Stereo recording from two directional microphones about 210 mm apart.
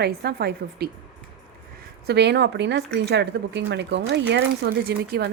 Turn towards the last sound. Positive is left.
turn(degrees=-45)  # may be behind; listen again after turning